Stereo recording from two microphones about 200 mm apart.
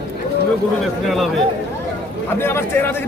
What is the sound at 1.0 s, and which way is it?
Speech, centre (ahead or behind).